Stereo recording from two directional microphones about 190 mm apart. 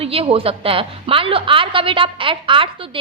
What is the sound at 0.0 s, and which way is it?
A woman's voice, 30° right (ahead or behind).